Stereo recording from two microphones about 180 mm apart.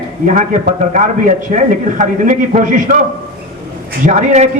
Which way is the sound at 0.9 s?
45° right (ahead or behind).